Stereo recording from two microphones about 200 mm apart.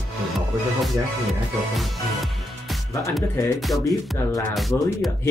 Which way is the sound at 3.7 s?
15° left (ahead or behind).